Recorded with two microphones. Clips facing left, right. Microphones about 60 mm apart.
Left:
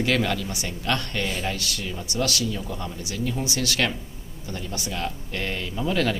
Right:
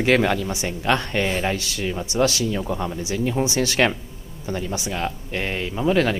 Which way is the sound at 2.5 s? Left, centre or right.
Right.